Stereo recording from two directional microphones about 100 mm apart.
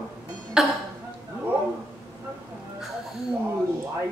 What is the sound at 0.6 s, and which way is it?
Speech, 5° right (ahead or behind).